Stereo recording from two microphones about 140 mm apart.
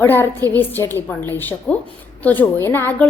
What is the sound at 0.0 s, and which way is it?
A woman's voice, 15° left (ahead or behind).